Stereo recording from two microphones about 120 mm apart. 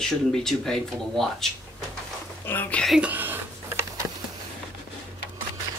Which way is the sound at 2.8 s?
10° right (ahead or behind).